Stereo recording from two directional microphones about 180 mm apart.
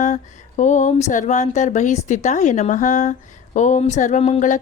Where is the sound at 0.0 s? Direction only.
40° left (ahead or behind).